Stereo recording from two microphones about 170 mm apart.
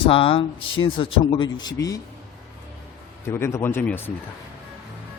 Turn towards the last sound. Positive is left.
turn(degrees=10)  # may be behind; listen again after turning